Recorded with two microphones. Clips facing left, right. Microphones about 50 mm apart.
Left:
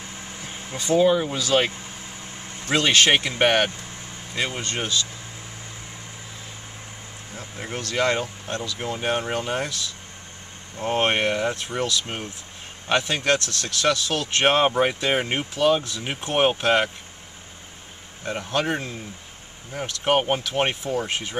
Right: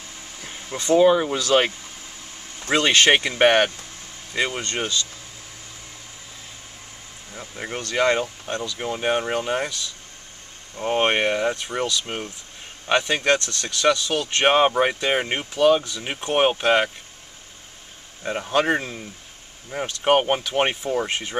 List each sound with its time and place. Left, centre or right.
0.5 s vehicle: centre
0.9 s speech: centre
2.7 s speech: centre
3.0 s speech: centre
7.3 s speech: centre
10.8 s speech: centre
18.2 s speech: centre